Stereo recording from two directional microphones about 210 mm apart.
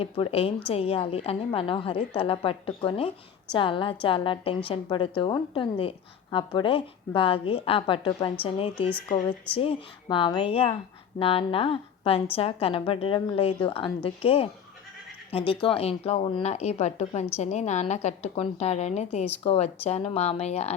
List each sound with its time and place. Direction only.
0.0 s a woman's voice: 25° left (ahead or behind)